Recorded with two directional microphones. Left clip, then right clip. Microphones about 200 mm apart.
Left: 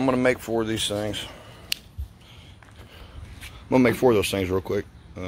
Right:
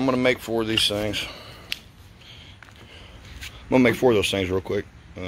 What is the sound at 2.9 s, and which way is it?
Speech, centre (ahead or behind).